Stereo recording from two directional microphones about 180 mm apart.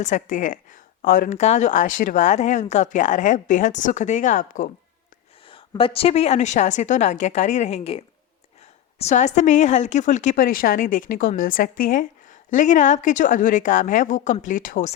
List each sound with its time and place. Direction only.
0.0 s a woman's voice: 45° left (ahead or behind)
5.5 s a woman's voice: 30° left (ahead or behind); by 14.9 s 45° left (ahead or behind)